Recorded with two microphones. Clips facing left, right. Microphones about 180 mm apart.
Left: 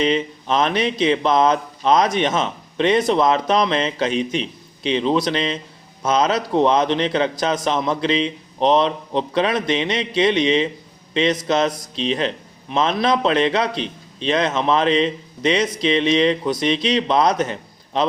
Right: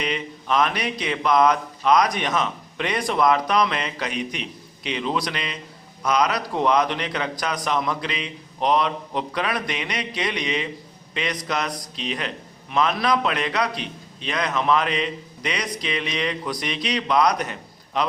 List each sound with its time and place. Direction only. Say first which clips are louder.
0.0 s speech: left 8 dB; 25° left (ahead or behind)